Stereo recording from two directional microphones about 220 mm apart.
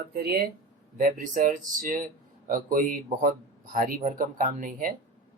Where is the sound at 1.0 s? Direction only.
35° right (ahead or behind).